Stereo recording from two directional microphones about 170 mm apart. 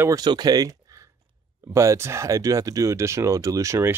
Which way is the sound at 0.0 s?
25° right (ahead or behind).